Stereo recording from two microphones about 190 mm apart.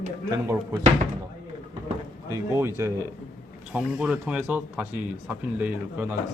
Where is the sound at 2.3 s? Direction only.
15° right (ahead or behind).